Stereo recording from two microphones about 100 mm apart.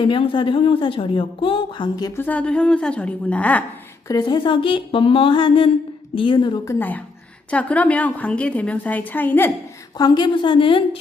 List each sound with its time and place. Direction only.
0.0 s speech: 60° left (ahead or behind)
2.1 s a woman's voice: 15° left (ahead or behind)
4.1 s a woman's voice: 40° left (ahead or behind)
4.4 s speech: 60° left (ahead or behind)
6.7 s a woman's voice: 15° left (ahead or behind)
10.0 s speech: 50° left (ahead or behind)